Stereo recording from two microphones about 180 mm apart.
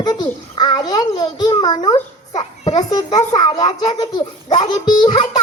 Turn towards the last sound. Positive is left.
turn(degrees=25)  # may be behind; listen again after turning